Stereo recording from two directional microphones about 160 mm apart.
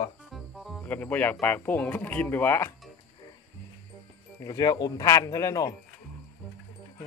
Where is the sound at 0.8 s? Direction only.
10° left (ahead or behind).